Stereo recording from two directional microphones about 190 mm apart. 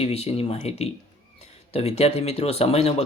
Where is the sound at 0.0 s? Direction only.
30° left (ahead or behind).